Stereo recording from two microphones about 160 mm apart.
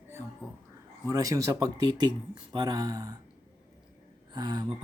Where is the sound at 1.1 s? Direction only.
20° right (ahead or behind).